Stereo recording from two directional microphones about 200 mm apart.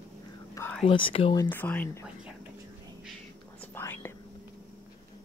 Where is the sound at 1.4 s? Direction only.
10° left (ahead or behind).